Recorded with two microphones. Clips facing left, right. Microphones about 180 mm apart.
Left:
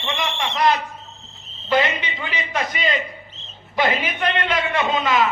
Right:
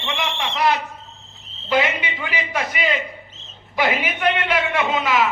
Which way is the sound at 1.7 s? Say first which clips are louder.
Even; 10° right (ahead or behind).